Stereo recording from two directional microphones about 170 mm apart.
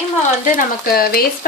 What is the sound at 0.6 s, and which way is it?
Speech, 60° left (ahead or behind).